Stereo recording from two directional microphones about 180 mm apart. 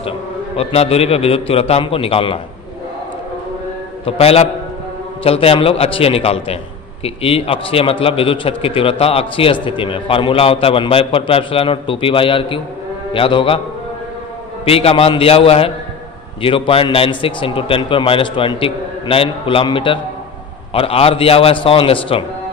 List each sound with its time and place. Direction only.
0.6 s a man's voice: 35° left (ahead or behind)
4.0 s a man's voice: 35° left (ahead or behind)
14.6 s a man's voice: 35° left (ahead or behind)